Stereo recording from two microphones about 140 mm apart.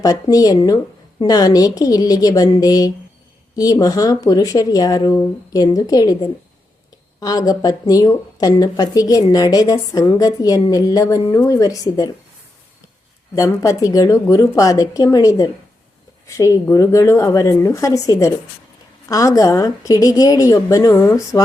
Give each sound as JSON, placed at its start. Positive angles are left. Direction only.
{"t": 0.0, "sound": "speech", "side_deg": 25}
{"t": 7.2, "sound": "speech", "side_deg": 25}
{"t": 13.3, "sound": "speech", "side_deg": 25}